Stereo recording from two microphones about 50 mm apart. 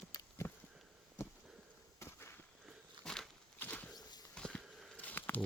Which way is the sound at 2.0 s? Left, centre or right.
Left.